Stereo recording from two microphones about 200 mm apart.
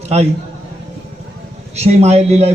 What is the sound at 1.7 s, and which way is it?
Speech, 30° right (ahead or behind).